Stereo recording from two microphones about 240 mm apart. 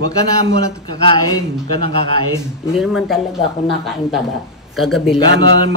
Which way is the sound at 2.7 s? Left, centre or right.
Centre.